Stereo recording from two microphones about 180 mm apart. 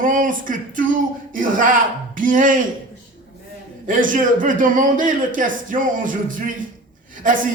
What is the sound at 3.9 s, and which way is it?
A man's voice, 50° right (ahead or behind).